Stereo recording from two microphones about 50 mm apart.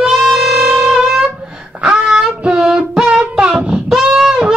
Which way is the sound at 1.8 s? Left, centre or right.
Right.